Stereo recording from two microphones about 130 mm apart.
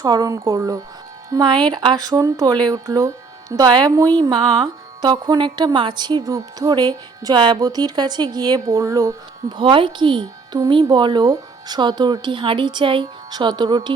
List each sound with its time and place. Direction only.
0.0 s speech: 30° right (ahead or behind)
9.6 s speech: 40° right (ahead or behind)